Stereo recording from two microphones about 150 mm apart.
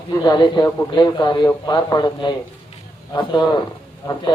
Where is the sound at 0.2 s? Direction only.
30° left (ahead or behind).